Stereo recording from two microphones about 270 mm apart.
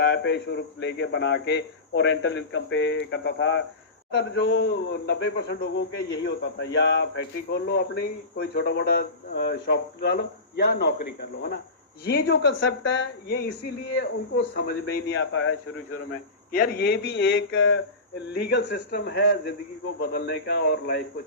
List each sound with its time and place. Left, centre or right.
0.0 s a man's voice: left
16.5 s a man's voice: left